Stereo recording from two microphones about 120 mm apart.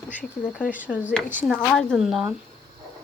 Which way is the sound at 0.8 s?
15° right (ahead or behind).